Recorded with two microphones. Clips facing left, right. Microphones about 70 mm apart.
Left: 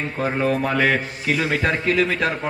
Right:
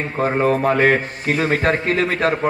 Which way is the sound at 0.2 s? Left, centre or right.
Right.